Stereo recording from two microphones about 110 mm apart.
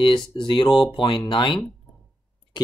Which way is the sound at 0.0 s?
50° left (ahead or behind).